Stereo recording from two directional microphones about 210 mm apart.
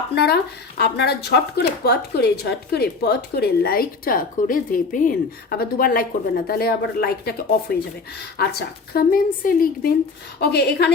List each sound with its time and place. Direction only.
0.1 s a woman's voice: 50° left (ahead or behind)